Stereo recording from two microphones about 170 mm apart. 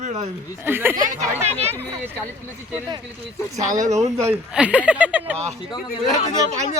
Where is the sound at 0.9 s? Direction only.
50° right (ahead or behind).